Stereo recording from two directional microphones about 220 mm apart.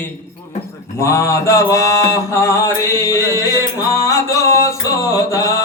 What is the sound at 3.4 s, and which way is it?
Music, 15° left (ahead or behind).